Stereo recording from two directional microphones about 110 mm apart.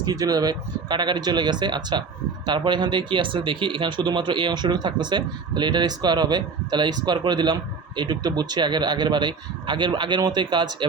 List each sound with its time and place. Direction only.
0.0 s speech: 35° right (ahead or behind)